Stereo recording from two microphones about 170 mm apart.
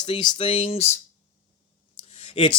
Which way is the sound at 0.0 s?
30° left (ahead or behind).